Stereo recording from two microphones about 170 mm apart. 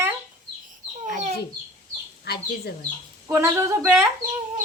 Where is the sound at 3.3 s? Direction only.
15° right (ahead or behind).